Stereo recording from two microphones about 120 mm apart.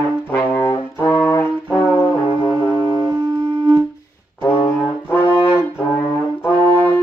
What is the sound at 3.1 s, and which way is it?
Music, 35° right (ahead or behind).